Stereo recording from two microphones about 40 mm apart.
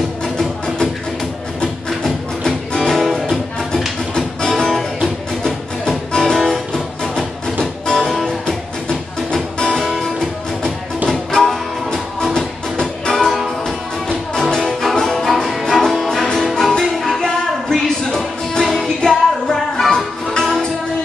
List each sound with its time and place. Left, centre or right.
2.4 s music: left
2.9 s music: centre
4.1 s music: left
6.7 s music: left
11.1 s music: centre
13.3 s music: centre
14.0 s music: centre